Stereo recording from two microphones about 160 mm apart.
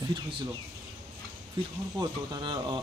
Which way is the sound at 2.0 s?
25° right (ahead or behind).